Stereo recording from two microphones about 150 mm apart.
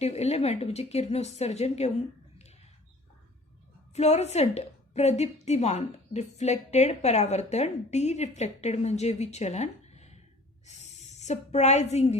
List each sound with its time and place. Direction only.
0.0 s a woman's voice: 45° left (ahead or behind)
3.9 s a woman's voice: 45° left (ahead or behind)